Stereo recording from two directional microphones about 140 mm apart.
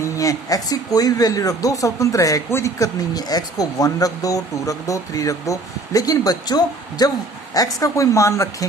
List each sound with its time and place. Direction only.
0.0 s speech: 25° left (ahead or behind)